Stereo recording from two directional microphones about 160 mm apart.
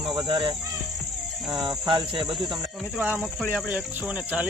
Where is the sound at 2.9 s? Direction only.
10° right (ahead or behind).